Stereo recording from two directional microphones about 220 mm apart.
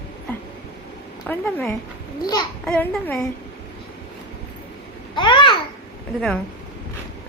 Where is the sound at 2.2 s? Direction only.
20° left (ahead or behind).